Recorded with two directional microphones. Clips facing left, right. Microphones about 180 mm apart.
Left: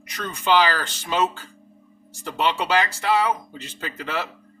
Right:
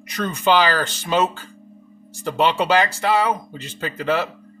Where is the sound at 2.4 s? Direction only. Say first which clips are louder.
Right 4 dB; 45° right (ahead or behind).